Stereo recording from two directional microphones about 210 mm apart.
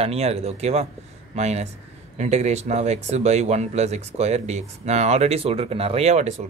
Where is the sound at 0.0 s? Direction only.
30° right (ahead or behind).